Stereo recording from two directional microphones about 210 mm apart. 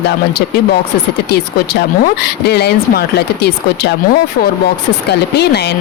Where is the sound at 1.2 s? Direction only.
50° left (ahead or behind).